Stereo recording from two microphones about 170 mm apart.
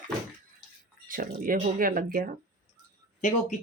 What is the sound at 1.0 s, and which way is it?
Speech, 55° right (ahead or behind).